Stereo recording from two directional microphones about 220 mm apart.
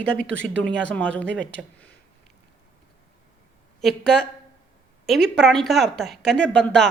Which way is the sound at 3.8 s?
5° left (ahead or behind).